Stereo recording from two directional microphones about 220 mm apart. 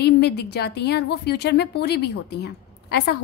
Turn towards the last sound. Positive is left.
turn(degrees=50)  # may be behind; listen again after turning